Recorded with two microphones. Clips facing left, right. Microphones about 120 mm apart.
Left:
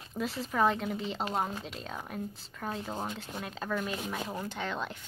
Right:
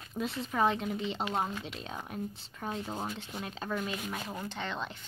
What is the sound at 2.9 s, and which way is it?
Speech, 15° left (ahead or behind).